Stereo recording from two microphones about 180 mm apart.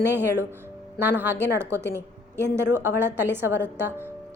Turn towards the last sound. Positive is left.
turn(degrees=-10)  # may be behind; listen again after turning